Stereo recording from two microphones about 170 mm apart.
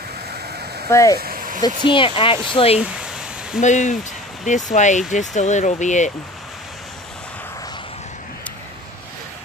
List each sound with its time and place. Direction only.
0.8 s speech: 20° left (ahead or behind)
1.2 s vehicle: 55° right (ahead or behind)
1.9 s speech: 30° left (ahead or behind)
3.6 s speech: 45° left (ahead or behind)